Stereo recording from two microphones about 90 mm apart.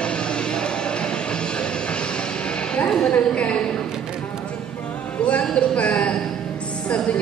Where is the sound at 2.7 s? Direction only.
10° left (ahead or behind).